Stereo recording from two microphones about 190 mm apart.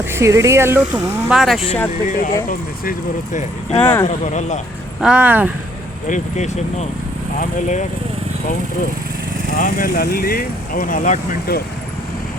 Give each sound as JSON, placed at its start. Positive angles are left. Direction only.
{"t": 0.1, "sound": "speech", "side_deg": -15}
{"t": 1.3, "sound": "speech", "side_deg": 0}
{"t": 2.0, "sound": "speech", "side_deg": 45}
{"t": 3.8, "sound": "speech", "side_deg": 10}
{"t": 4.0, "sound": "speech", "side_deg": 40}
{"t": 4.9, "sound": "speech", "side_deg": -5}
{"t": 6.1, "sound": "speech", "side_deg": 40}
{"t": 9.6, "sound": "speech", "side_deg": 45}